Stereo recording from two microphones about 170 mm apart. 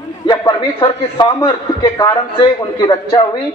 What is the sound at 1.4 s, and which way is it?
A man's voice, 25° left (ahead or behind).